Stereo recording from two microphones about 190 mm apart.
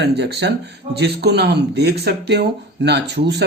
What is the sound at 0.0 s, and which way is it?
Speech, 65° right (ahead or behind).